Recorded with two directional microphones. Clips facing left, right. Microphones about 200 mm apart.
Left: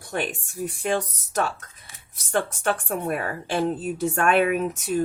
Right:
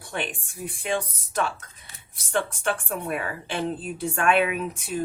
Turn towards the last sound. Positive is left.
turn(degrees=45)  # may be behind; listen again after turning